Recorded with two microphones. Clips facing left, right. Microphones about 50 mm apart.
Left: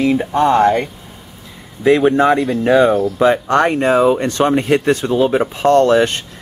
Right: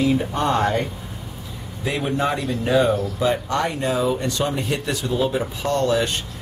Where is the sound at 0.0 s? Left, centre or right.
Left.